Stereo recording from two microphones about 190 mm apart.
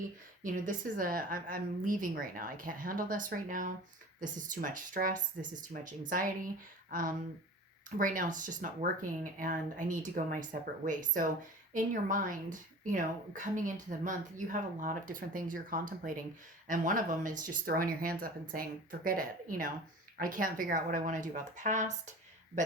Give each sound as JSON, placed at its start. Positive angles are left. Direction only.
{"t": 0.4, "sound": "speech", "side_deg": -45}